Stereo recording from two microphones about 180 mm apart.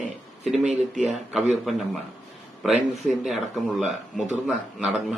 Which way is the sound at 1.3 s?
Centre (ahead or behind).